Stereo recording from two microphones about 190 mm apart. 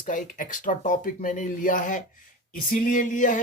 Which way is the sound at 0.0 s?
45° left (ahead or behind).